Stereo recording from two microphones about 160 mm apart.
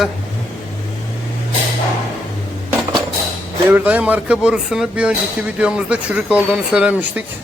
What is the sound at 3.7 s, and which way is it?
Speech, 10° right (ahead or behind).